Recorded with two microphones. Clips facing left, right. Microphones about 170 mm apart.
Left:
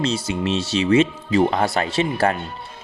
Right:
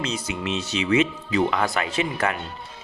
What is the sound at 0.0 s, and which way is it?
Speech, 30° left (ahead or behind).